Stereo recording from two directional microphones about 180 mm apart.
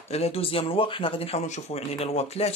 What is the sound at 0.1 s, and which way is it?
Speech, 35° left (ahead or behind).